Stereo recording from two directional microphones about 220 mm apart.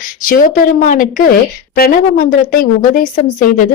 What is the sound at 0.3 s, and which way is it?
A woman's voice, 35° left (ahead or behind).